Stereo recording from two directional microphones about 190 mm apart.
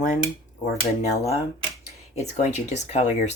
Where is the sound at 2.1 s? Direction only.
35° left (ahead or behind).